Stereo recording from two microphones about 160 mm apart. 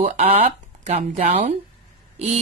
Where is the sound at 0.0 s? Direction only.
45° right (ahead or behind).